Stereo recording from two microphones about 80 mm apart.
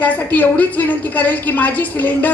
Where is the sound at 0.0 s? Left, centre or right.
Left.